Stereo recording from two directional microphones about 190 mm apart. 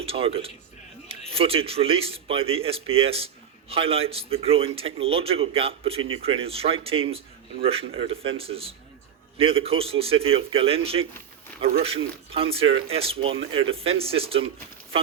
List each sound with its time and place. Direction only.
0.0 s a man's voice: 30° right (ahead or behind)